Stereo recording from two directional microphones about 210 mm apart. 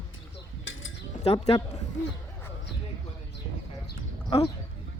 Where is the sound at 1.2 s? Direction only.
30° left (ahead or behind).